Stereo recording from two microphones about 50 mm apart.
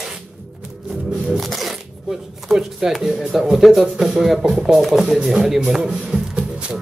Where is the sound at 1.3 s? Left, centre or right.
Centre.